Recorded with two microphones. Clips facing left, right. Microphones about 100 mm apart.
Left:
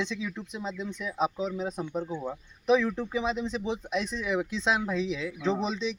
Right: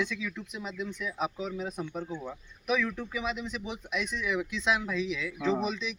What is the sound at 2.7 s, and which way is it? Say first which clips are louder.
Speech: left 6 dB; 30° left (ahead or behind).